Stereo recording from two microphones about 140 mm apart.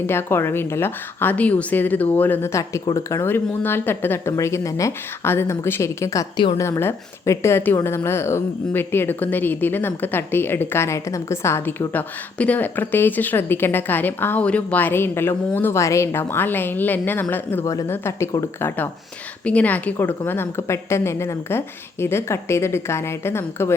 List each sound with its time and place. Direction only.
0.1 s a woman's voice: 15° left (ahead or behind)
6.3 s a woman's voice: 35° left (ahead or behind)
6.6 s a woman's voice: 20° left (ahead or behind)
19.5 s a woman's voice: 10° left (ahead or behind)